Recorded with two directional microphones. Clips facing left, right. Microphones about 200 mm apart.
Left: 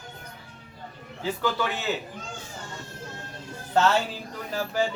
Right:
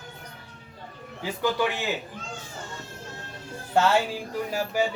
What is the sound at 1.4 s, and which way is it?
Speech, 15° right (ahead or behind).